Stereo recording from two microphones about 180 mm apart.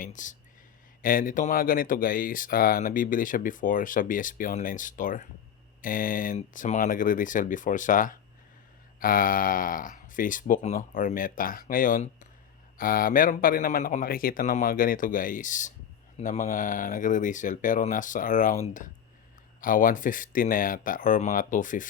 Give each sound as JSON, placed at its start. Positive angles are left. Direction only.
{"t": 0.0, "sound": "speech", "side_deg": 45}